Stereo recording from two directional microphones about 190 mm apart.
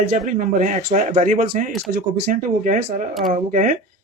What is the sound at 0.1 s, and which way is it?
Speech, 45° right (ahead or behind).